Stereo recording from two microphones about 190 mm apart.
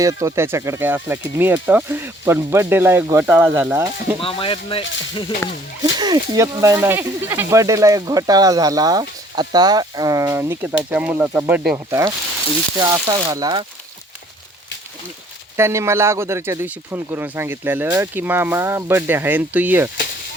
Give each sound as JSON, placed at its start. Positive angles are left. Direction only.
{"t": 0.0, "sound": "speech", "side_deg": -15}
{"t": 4.2, "sound": "speech", "side_deg": 30}
{"t": 5.8, "sound": "speech", "side_deg": -20}
{"t": 15.5, "sound": "speech", "side_deg": -15}